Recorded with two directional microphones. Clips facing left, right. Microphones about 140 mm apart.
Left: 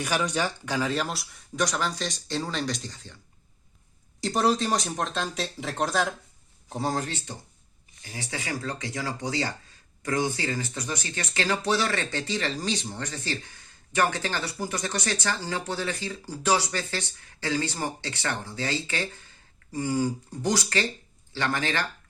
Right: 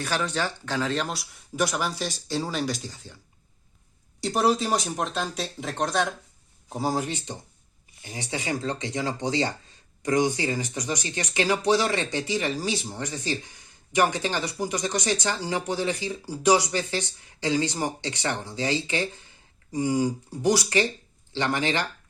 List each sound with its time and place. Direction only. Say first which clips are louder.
0.0 s speech: left 1 dB; 15° left (ahead or behind); by 3.2 s 10° right (ahead or behind)
4.2 s speech: right 1 dB; centre (ahead or behind); by 21.8 s 15° right (ahead or behind)